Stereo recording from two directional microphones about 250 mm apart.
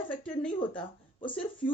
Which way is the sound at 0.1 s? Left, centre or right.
Centre.